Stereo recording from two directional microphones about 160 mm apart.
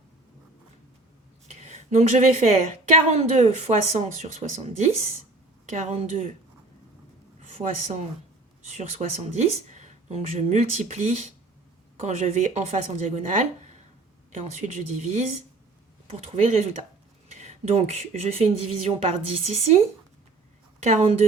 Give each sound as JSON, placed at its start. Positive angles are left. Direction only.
{"t": 1.5, "sound": "speech", "side_deg": -45}
{"t": 7.4, "sound": "speech", "side_deg": -40}
{"t": 16.3, "sound": "speech", "side_deg": -45}
{"t": 20.8, "sound": "speech", "side_deg": -40}